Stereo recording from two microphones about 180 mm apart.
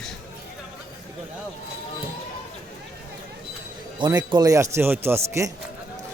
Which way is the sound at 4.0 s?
25° right (ahead or behind).